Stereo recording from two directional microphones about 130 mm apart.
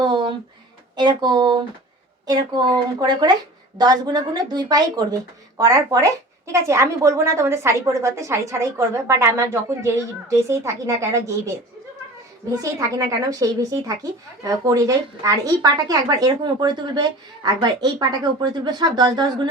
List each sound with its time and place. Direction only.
0.0 s a sound: 35° right (ahead or behind)
0.9 s speech: 35° right (ahead or behind)
13.0 s speech: 25° right (ahead or behind)